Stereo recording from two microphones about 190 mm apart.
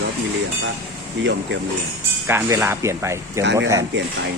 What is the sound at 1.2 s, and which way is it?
Speech, 70° right (ahead or behind).